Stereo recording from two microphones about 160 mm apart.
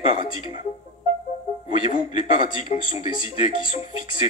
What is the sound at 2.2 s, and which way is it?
Speech, 50° left (ahead or behind).